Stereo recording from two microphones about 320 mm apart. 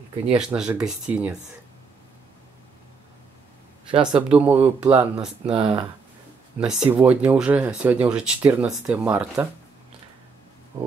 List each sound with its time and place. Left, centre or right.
0.4 s speech: centre
3.9 s speech: centre
5.4 s speech: centre
6.6 s speech: centre